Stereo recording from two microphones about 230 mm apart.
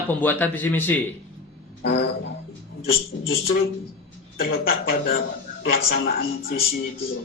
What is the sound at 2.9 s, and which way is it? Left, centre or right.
Speech, left.